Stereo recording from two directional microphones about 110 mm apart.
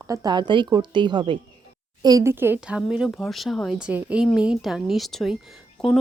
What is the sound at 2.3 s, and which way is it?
Speech, 20° right (ahead or behind).